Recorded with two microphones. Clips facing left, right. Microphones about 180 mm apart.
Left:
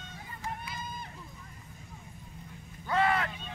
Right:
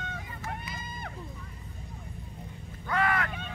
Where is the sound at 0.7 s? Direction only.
55° right (ahead or behind).